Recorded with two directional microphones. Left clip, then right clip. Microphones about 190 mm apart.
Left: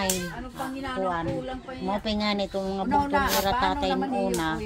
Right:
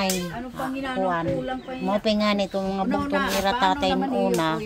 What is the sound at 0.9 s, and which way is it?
Speech, 50° right (ahead or behind).